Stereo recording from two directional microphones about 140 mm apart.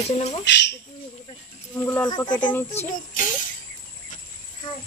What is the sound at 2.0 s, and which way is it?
Speech, 30° left (ahead or behind).